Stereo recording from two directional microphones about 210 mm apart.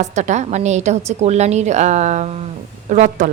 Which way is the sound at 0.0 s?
35° right (ahead or behind).